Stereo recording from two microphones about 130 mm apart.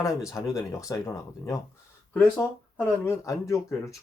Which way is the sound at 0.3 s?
25° left (ahead or behind).